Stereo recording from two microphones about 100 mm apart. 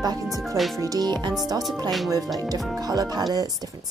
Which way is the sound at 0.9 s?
40° right (ahead or behind).